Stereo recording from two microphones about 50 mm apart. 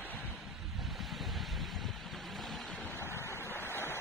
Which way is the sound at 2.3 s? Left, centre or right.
Centre.